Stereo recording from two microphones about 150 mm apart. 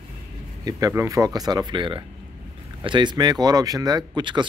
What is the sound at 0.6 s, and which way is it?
Speech, 25° right (ahead or behind).